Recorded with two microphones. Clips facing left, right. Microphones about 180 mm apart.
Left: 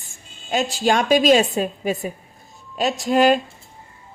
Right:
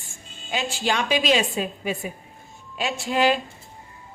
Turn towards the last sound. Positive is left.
turn(degrees=45)  # may be behind; listen again after turning